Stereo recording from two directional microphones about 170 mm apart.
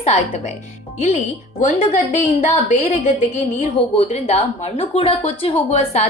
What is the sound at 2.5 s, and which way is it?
A woman's voice, 40° left (ahead or behind).